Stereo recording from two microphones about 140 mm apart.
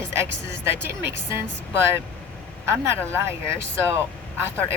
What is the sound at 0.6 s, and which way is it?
Speech, 15° right (ahead or behind).